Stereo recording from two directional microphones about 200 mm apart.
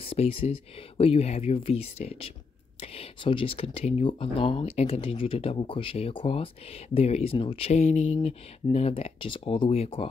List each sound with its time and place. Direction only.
0.0 s speech: 30° left (ahead or behind)